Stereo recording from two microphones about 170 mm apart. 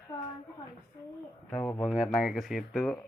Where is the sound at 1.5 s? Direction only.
10° left (ahead or behind).